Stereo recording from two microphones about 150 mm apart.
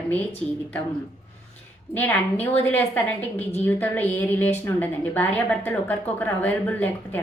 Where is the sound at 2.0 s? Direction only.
10° left (ahead or behind).